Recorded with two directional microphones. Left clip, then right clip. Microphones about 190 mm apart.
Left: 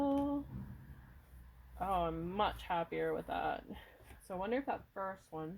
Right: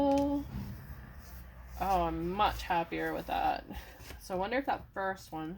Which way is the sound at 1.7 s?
45° left (ahead or behind).